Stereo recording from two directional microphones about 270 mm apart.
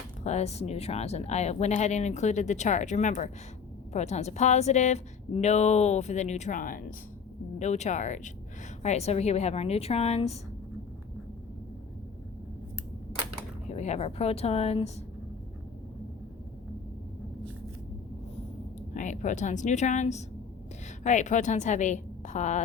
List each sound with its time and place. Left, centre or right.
0.3 s speech: left
13.7 s speech: left
18.9 s speech: left